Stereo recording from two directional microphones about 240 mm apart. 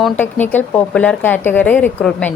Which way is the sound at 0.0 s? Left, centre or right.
Centre.